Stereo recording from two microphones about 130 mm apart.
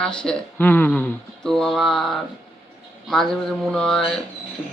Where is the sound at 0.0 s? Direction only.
5° left (ahead or behind).